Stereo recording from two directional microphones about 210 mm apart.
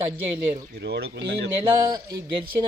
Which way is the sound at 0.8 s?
55° right (ahead or behind).